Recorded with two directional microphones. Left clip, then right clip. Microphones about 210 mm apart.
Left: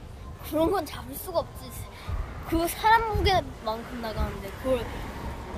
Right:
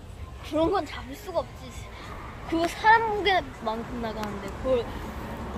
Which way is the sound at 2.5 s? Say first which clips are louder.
Right 2 dB; 25° left (ahead or behind).